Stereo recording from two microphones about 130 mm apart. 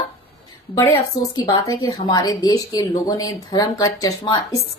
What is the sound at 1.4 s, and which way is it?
A woman's voice, 35° left (ahead or behind).